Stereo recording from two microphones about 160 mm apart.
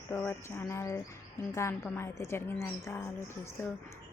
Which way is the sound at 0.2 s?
15° left (ahead or behind).